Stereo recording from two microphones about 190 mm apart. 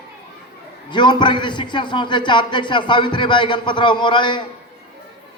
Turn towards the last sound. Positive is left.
turn(degrees=25)  # may be behind; listen again after turning